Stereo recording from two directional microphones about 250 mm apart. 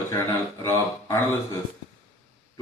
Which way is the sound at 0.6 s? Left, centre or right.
Centre.